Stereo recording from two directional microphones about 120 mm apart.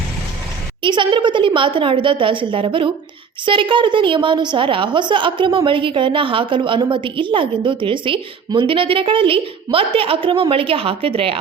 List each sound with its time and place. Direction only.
0.8 s a woman's voice: 40° right (ahead or behind)